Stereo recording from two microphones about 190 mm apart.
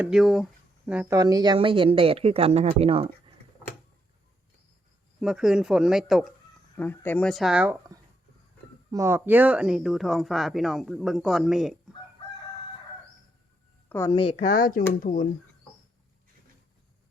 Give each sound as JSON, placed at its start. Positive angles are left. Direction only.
{"t": 0.0, "sound": "speech", "side_deg": -5}
{"t": 5.2, "sound": "speech", "side_deg": -5}
{"t": 6.7, "sound": "speech", "side_deg": 10}
{"t": 14.1, "sound": "speech", "side_deg": 30}
{"t": 14.4, "sound": "speech", "side_deg": 50}